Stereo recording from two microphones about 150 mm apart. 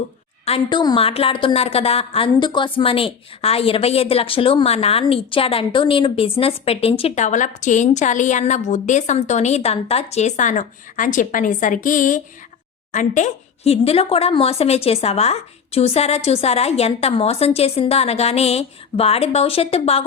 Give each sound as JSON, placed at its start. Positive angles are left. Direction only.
{"t": 0.4, "sound": "a woman's voice", "side_deg": 35}
{"t": 7.3, "sound": "a woman's voice", "side_deg": 55}